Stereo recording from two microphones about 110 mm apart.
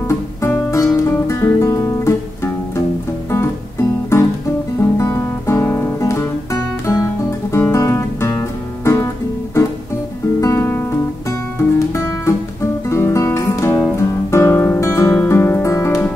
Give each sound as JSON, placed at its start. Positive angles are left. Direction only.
{"t": 0.1, "sound": "music", "side_deg": 25}
{"t": 4.1, "sound": "music", "side_deg": 25}
{"t": 7.5, "sound": "guitar", "side_deg": 25}
{"t": 11.5, "sound": "music", "side_deg": 25}
{"t": 12.9, "sound": "guitar", "side_deg": 25}
{"t": 15.2, "sound": "music", "side_deg": 20}